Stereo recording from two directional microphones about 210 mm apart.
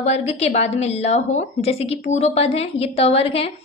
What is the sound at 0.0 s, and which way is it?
A woman's voice, 30° left (ahead or behind).